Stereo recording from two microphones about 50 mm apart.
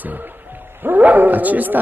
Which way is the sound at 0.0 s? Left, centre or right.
Right.